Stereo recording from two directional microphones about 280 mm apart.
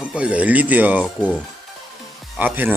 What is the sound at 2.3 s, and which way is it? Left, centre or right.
Speech, centre.